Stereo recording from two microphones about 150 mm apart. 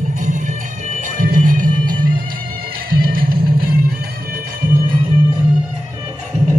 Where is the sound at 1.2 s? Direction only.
65° right (ahead or behind).